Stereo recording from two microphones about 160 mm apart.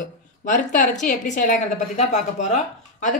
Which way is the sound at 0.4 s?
55° left (ahead or behind).